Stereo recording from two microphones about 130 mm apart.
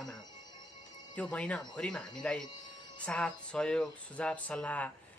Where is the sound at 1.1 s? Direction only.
10° left (ahead or behind).